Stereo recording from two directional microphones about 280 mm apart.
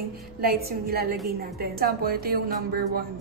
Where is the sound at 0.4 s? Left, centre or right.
Right.